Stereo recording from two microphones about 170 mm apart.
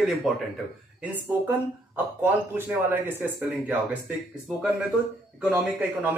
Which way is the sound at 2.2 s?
10° right (ahead or behind).